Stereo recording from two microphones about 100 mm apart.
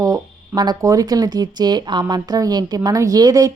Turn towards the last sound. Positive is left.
turn(degrees=-40)  # may be behind; listen again after turning